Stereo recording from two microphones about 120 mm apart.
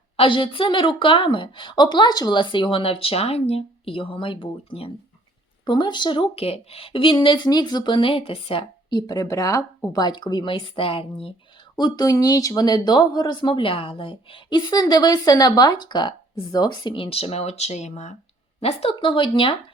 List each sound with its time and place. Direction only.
0.2 s a woman's voice: 45° left (ahead or behind)
8.9 s speech: 35° left (ahead or behind); by 11.6 s 50° left (ahead or behind)
11.8 s speech: 30° left (ahead or behind); by 18.1 s 70° left (ahead or behind)
18.6 s a woman's voice: 55° left (ahead or behind)
18.9 s a woman's voice: 45° left (ahead or behind)